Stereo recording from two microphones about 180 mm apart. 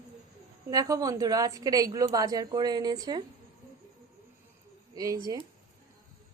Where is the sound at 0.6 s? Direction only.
20° right (ahead or behind).